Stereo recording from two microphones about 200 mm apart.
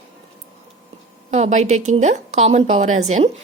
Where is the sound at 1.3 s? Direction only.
35° right (ahead or behind).